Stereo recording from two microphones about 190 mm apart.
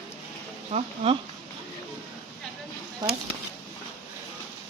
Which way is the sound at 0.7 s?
35° right (ahead or behind).